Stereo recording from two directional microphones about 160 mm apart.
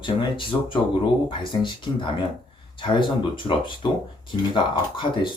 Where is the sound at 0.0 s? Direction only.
30° left (ahead or behind).